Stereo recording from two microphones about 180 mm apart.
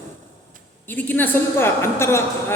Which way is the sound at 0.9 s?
10° left (ahead or behind).